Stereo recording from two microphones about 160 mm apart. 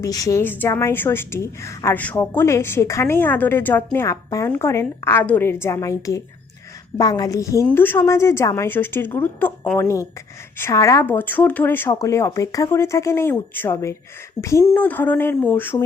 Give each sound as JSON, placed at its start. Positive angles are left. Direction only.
{"t": 0.0, "sound": "a woman's voice", "side_deg": 20}